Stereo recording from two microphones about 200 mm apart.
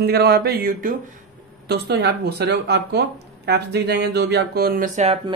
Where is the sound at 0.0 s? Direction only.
55° right (ahead or behind).